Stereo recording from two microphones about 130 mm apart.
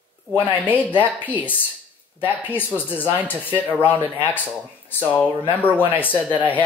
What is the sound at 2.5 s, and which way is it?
Speech, 15° left (ahead or behind).